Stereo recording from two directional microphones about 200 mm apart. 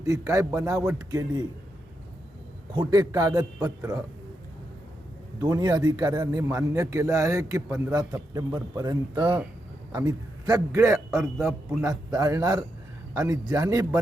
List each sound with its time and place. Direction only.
0.0 s a man's voice: 15° right (ahead or behind)
2.7 s a man's voice: 20° right (ahead or behind)
5.4 s a man's voice: 20° right (ahead or behind)